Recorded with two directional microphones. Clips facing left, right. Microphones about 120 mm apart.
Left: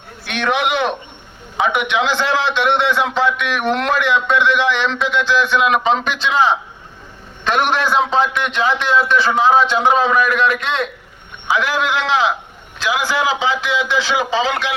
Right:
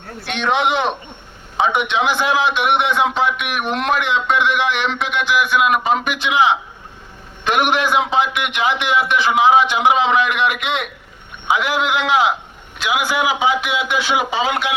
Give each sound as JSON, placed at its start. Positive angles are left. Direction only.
{"t": 0.3, "sound": "a man's voice", "side_deg": -20}